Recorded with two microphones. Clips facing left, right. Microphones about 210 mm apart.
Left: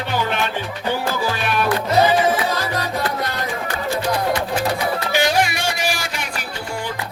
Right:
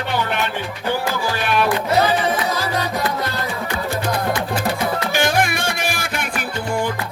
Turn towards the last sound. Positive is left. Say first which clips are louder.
# even
turn(degrees=-55)  # may be behind; listen again after turning